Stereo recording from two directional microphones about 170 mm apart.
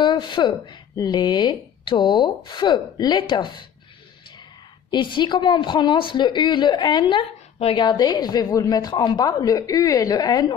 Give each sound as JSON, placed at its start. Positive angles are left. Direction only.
{"t": 0.0, "sound": "a woman's voice", "side_deg": 30}
{"t": 4.9, "sound": "a woman's voice", "side_deg": 30}